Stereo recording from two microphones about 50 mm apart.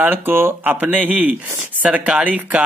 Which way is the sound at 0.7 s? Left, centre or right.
Right.